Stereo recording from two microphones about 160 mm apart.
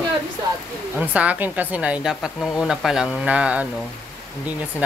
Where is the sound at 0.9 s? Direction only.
10° right (ahead or behind).